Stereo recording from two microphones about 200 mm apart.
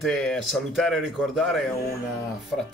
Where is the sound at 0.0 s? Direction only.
Centre (ahead or behind).